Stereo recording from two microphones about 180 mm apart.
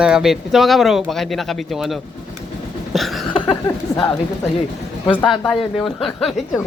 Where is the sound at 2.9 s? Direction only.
Centre (ahead or behind).